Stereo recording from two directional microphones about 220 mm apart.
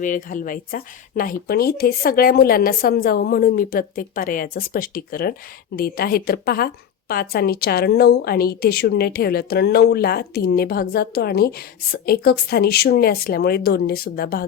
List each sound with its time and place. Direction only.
0.0 s a woman's voice: 35° left (ahead or behind)